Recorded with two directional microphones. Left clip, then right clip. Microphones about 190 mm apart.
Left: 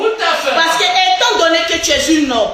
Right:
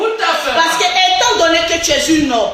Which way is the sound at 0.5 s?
10° left (ahead or behind).